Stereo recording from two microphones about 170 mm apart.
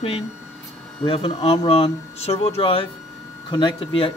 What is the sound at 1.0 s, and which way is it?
Speech, 35° left (ahead or behind).